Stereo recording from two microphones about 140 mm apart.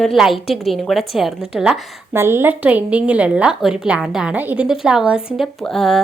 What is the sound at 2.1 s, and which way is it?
A woman's voice, 15° right (ahead or behind).